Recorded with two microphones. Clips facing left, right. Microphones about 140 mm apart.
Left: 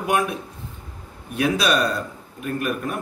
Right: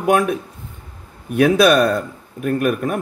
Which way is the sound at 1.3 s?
50° right (ahead or behind).